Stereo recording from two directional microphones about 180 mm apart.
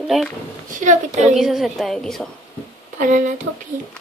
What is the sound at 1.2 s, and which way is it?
Speech, centre (ahead or behind).